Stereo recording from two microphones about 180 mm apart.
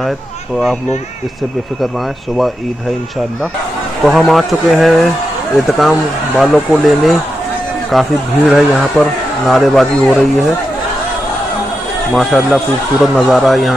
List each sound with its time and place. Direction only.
4.0 s speech: centre (ahead or behind)
12.1 s speech: centre (ahead or behind)